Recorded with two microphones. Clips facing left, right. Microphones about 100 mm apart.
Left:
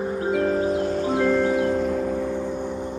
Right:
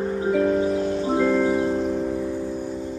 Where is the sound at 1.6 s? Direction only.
85° left; by 3.0 s 65° left (ahead or behind).